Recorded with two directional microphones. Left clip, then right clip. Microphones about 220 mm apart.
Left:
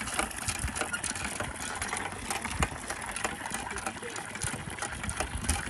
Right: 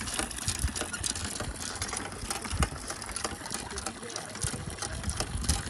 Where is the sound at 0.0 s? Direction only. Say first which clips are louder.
Left 2 dB; 20° left (ahead or behind).